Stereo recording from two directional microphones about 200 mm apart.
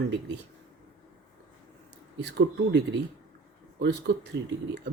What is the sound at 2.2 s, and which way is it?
Speech, 60° right (ahead or behind).